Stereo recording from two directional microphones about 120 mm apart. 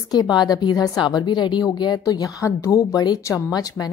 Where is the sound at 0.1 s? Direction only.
35° left (ahead or behind).